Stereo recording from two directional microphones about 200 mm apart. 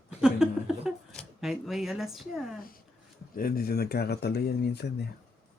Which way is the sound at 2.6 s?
45° left (ahead or behind).